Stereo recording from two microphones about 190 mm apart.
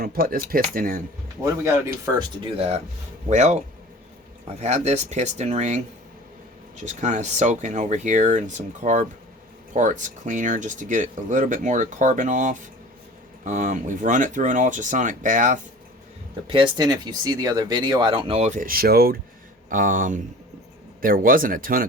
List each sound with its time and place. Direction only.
0.0 s speech: 50° right (ahead or behind)
1.5 s speech: 15° right (ahead or behind); by 5.8 s 40° right (ahead or behind)
6.8 s speech: 40° right (ahead or behind)
16.5 s speech: 25° right (ahead or behind); by 21.8 s 50° right (ahead or behind)